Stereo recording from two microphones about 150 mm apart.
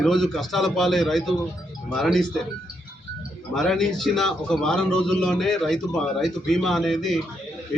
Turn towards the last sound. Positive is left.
turn(degrees=0)  # may be behind; listen again after turning